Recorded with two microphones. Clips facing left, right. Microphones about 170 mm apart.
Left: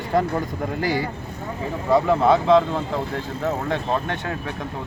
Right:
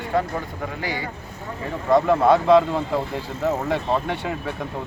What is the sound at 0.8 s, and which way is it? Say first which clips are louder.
Speech: left 7 dB; 35° left (ahead or behind).